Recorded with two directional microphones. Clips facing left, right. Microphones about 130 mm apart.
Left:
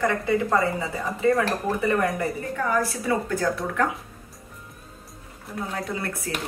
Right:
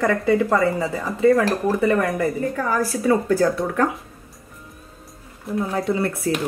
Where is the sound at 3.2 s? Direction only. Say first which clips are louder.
Right 6 dB; 35° right (ahead or behind).